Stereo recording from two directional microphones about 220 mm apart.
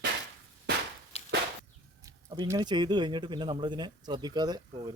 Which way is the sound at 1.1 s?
30° left (ahead or behind).